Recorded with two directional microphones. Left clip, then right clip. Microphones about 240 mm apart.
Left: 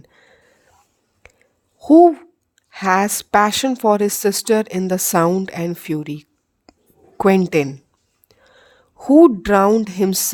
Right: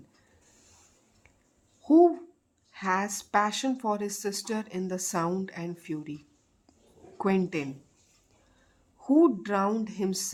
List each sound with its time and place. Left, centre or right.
1.2 s whispering: left
1.8 s a woman's voice: left
6.7 s whispering: left
7.2 s a woman's voice: left